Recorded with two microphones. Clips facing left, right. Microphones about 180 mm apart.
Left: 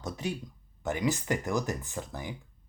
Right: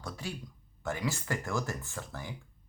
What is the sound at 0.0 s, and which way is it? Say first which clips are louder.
Speech: left 6 dB; 20° left (ahead or behind).